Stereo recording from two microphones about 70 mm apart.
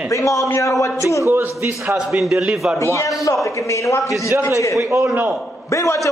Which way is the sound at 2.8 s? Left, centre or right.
Left.